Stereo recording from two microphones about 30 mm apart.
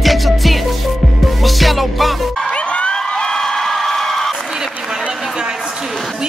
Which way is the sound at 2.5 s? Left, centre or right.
Left.